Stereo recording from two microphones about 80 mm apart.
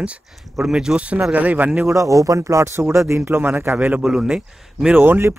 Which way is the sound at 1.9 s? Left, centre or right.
Right.